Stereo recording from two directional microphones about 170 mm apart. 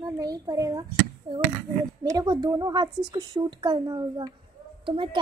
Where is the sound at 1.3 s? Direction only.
25° right (ahead or behind).